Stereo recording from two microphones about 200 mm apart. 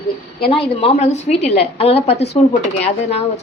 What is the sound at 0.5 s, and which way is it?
A woman's voice, 30° left (ahead or behind).